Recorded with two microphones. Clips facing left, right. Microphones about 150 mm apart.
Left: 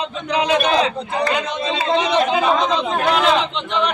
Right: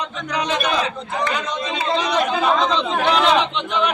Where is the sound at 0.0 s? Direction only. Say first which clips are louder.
Left 4 dB; 30° left (ahead or behind).